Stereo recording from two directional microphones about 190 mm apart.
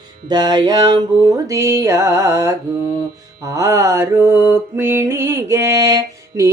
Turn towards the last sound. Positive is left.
turn(degrees=-15)  # may be behind; listen again after turning